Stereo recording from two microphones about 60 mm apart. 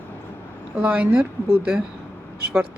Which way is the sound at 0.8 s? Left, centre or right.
Centre.